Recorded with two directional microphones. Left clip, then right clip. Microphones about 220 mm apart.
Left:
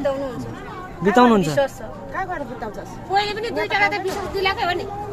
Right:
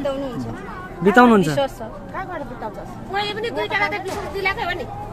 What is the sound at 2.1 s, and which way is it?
A woman's voice, 40° left (ahead or behind).